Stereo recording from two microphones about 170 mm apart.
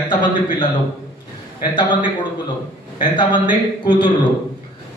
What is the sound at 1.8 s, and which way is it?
A man's voice, 25° left (ahead or behind).